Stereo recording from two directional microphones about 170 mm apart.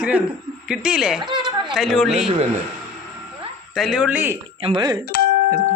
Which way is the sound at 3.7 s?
Centre (ahead or behind).